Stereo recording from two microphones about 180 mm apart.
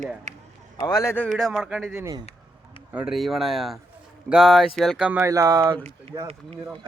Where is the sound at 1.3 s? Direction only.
Centre (ahead or behind).